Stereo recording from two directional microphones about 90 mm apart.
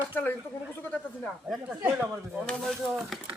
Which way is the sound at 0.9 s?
5° left (ahead or behind).